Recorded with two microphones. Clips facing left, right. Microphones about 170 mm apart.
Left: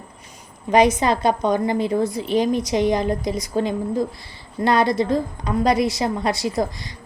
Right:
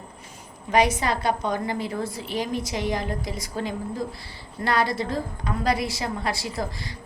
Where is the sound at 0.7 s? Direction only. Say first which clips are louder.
Left 5 dB; 20° left (ahead or behind).